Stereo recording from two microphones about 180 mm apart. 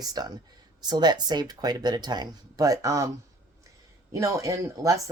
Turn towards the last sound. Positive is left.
turn(degrees=-20)  # may be behind; listen again after turning